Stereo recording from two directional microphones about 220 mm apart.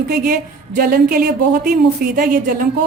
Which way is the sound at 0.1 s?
40° right (ahead or behind).